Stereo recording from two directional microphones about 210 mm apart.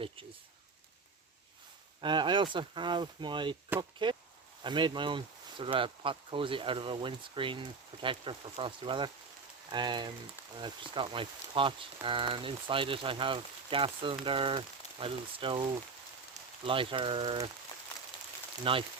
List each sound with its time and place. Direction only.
2.0 s speech: 20° right (ahead or behind)
18.6 s speech: 25° right (ahead or behind)